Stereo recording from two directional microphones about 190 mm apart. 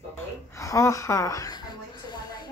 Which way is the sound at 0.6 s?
15° left (ahead or behind).